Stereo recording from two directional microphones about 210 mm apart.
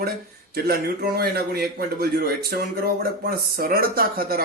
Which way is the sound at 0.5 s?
45° right (ahead or behind).